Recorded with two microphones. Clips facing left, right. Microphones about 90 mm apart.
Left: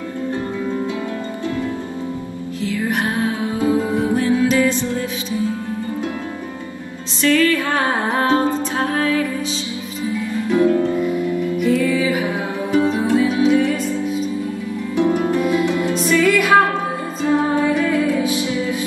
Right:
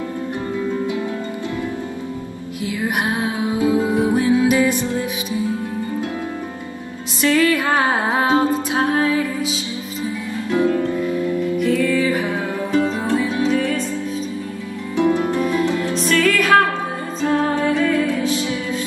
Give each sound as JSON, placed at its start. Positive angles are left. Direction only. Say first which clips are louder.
{"t": 2.6, "sound": "music", "louder": "left 1 dB", "side_deg": -15}
{"t": 7.2, "sound": "music", "louder": "even", "side_deg": -15}
{"t": 11.5, "sound": "music", "louder": "left 1 dB", "side_deg": 10}
{"t": 15.7, "sound": "music", "louder": "left 1 dB", "side_deg": 5}